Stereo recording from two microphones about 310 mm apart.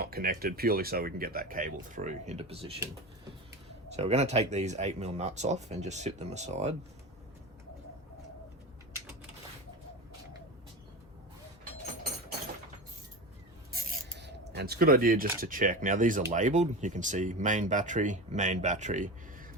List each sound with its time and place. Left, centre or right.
0.0 s speech: right
3.9 s speech: centre
13.9 s a sound: right
14.5 s speech: right